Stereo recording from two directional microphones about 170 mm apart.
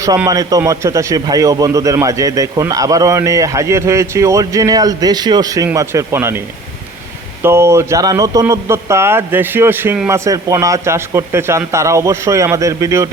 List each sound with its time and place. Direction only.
0.3 s a man's voice: 20° right (ahead or behind)
7.4 s a man's voice: 15° right (ahead or behind)